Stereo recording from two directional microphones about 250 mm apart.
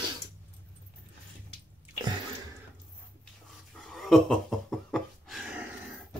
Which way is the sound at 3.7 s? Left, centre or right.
Centre.